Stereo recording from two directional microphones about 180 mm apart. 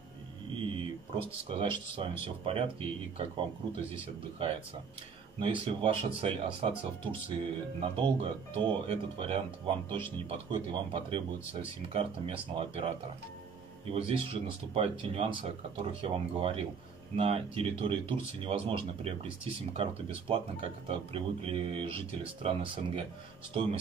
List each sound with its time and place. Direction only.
1.1 s speech: 30° right (ahead or behind)
5.7 s speech: 30° right (ahead or behind)
13.9 s speech: 30° right (ahead or behind)